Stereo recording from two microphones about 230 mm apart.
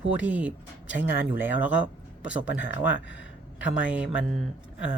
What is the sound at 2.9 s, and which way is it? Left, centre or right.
Speech, left.